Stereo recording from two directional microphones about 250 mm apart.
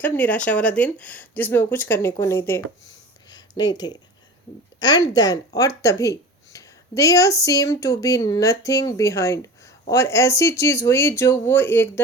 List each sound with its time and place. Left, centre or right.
0.0 s speech: centre